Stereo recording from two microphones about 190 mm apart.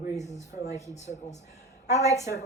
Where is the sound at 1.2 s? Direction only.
35° left (ahead or behind).